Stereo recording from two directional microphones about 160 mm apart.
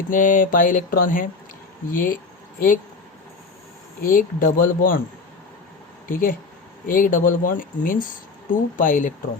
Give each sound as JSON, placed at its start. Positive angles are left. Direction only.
{"t": 0.1, "sound": "mantra", "side_deg": 55}
{"t": 4.0, "sound": "mantra", "side_deg": 60}
{"t": 6.1, "sound": "mantra", "side_deg": 60}